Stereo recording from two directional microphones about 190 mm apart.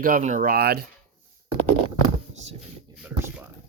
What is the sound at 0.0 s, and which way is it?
Speech, 45° right (ahead or behind).